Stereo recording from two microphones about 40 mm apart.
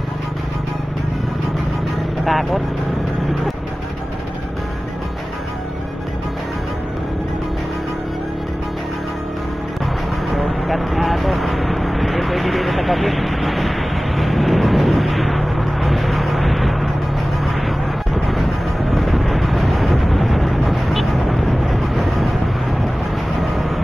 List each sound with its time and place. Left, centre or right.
2.2 s speech: centre
10.4 s vehicle: centre